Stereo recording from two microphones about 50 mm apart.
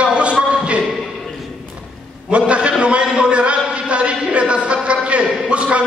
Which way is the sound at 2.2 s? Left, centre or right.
Right.